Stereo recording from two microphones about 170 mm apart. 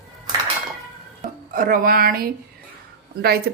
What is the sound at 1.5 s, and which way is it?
A woman's voice, 55° right (ahead or behind).